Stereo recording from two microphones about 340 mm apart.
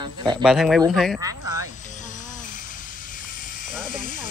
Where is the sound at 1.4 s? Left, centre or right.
Right.